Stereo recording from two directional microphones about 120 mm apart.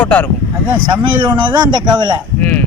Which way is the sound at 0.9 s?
35° right (ahead or behind).